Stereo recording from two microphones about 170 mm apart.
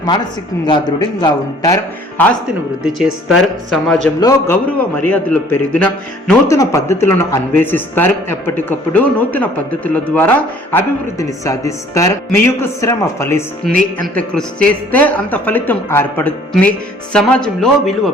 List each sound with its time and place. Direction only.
0.7 s a man's voice: 25° left (ahead or behind)
2.8 s speech: centre (ahead or behind)
4.2 s a man's voice: 20° left (ahead or behind)
4.9 s speech: 10° left (ahead or behind)